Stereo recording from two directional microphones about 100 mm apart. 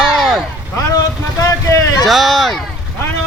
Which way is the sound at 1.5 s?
35° left (ahead or behind).